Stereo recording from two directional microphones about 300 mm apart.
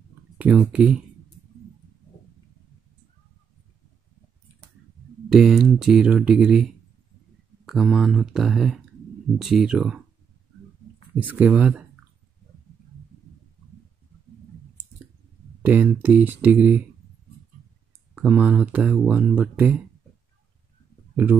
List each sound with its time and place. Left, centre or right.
0.4 s speech: centre
5.3 s speech: centre
11.1 s speech: centre
15.6 s speech: centre
18.1 s speech: centre